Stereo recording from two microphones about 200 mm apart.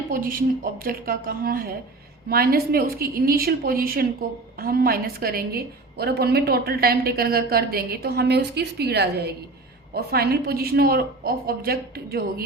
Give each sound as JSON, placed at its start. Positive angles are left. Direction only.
{"t": 0.1, "sound": "a woman's voice", "side_deg": -45}